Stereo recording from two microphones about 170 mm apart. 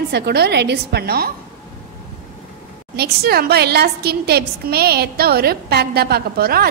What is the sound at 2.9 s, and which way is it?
A woman's voice, 70° right (ahead or behind).